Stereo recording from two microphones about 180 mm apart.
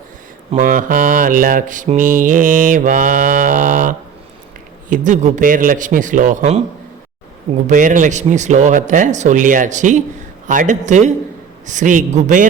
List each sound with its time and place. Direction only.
0.5 s mantra: 50° right (ahead or behind)
7.7 s mantra: 45° right (ahead or behind)